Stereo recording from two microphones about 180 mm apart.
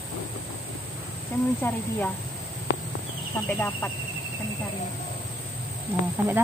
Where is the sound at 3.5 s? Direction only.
10° left (ahead or behind).